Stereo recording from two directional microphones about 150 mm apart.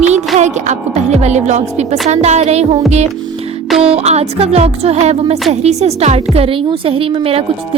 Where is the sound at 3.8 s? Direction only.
40° right (ahead or behind).